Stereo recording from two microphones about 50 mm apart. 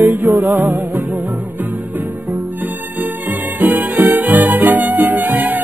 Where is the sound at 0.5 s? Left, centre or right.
Right.